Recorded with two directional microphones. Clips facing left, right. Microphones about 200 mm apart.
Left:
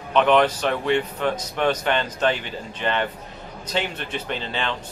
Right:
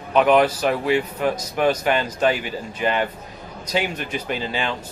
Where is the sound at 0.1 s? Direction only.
10° right (ahead or behind).